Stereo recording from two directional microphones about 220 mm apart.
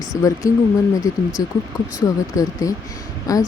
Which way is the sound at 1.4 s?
15° left (ahead or behind).